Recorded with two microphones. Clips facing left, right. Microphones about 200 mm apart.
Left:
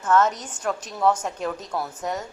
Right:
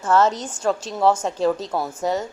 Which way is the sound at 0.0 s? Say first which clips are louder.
Right 2 dB; 30° right (ahead or behind).